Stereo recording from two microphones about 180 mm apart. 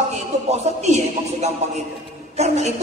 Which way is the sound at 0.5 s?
40° right (ahead or behind).